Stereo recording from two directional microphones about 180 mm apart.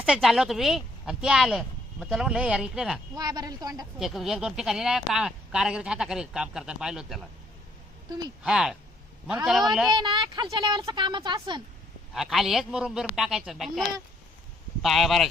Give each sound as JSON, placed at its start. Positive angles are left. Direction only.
{"t": 0.0, "sound": "speech", "side_deg": 0}
{"t": 3.2, "sound": "a woman's voice", "side_deg": -20}
{"t": 3.9, "sound": "speech", "side_deg": 0}
{"t": 8.4, "sound": "speech", "side_deg": -5}
{"t": 9.9, "sound": "a woman's voice", "side_deg": -25}
{"t": 12.1, "sound": "speech", "side_deg": 0}